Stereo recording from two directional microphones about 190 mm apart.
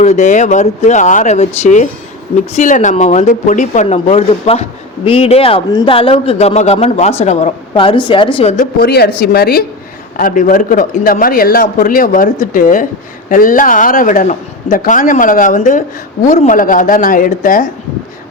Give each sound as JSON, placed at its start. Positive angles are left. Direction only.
{"t": 0.0, "sound": "a man's voice", "side_deg": 35}
{"t": 8.5, "sound": "speech", "side_deg": 55}